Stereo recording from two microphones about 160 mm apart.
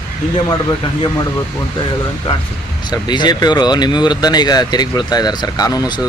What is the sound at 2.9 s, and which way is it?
Speech, 25° left (ahead or behind).